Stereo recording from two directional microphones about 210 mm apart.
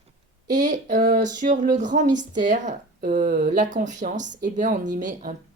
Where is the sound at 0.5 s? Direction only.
35° right (ahead or behind).